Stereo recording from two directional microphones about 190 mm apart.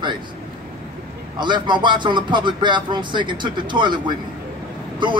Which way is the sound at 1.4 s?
25° right (ahead or behind).